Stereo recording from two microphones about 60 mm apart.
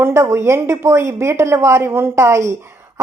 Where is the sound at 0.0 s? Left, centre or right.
Right.